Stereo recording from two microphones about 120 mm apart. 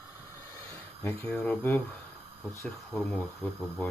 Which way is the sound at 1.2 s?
10° left (ahead or behind).